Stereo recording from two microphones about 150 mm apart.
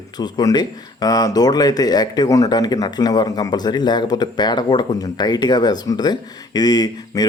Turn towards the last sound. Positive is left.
turn(degrees=25)  # may be behind; listen again after turning